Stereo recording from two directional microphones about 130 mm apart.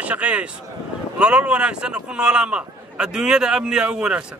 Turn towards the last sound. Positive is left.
turn(degrees=-5)  # may be behind; listen again after turning